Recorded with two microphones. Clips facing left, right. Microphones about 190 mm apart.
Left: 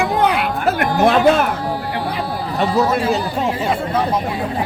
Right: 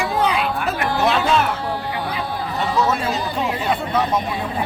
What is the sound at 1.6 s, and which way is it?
Music, 10° left (ahead or behind).